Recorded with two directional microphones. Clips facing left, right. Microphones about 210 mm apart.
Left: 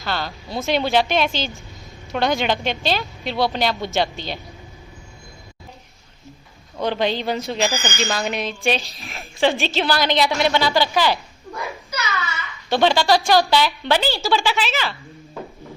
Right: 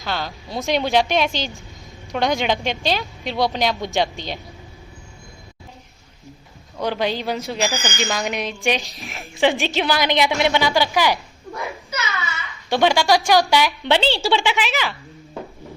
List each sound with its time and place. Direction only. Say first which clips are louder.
0.0 s a woman's voice: even; 15° right (ahead or behind)
6.8 s a woman's voice: left 1 dB; 10° right (ahead or behind)
12.0 s a sound: left 3 dB; centre (ahead or behind)
12.7 s a woman's voice: even; 15° right (ahead or behind); by 14.4 s 30° right (ahead or behind)
14.4 s a woman's voice: right 1 dB; 15° right (ahead or behind)